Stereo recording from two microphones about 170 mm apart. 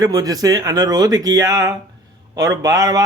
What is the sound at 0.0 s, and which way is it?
A man's voice, 20° right (ahead or behind).